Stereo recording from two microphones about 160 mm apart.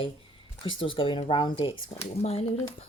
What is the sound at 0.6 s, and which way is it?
Speech, 35° left (ahead or behind).